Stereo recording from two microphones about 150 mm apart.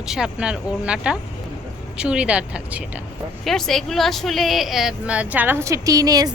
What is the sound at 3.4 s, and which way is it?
A woman's voice, 5° left (ahead or behind).